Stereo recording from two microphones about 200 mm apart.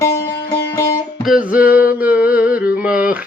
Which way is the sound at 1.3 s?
5° right (ahead or behind).